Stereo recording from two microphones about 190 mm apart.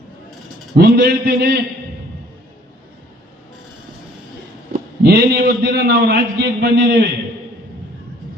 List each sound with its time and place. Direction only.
0.8 s a man's voice: 60° right (ahead or behind)
4.7 s a man's voice: 60° right (ahead or behind)